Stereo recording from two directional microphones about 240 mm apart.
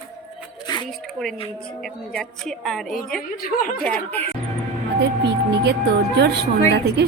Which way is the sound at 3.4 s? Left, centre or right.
Left.